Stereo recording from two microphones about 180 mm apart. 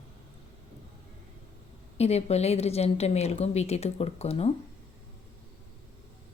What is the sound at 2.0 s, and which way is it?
A woman's voice, 35° left (ahead or behind).